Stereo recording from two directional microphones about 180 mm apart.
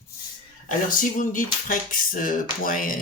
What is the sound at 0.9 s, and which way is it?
Speech, 50° left (ahead or behind).